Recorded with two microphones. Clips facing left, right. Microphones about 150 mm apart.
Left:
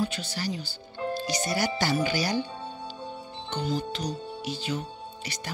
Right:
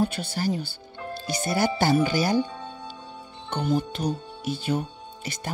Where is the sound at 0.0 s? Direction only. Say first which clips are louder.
Right 5 dB; 55° right (ahead or behind).